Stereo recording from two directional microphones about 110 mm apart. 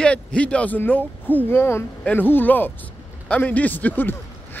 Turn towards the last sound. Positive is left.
turn(degrees=15)  # may be behind; listen again after turning